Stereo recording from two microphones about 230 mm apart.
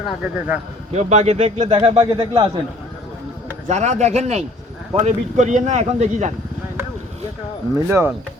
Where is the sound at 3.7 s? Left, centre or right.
Right.